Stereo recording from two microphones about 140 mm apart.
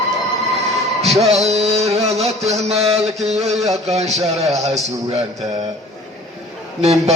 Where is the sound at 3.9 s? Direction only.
50° right (ahead or behind).